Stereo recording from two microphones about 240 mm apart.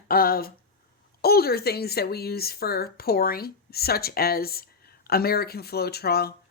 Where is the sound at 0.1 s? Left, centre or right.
Left.